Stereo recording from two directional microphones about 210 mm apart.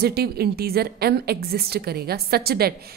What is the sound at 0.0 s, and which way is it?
A woman's voice, 45° right (ahead or behind).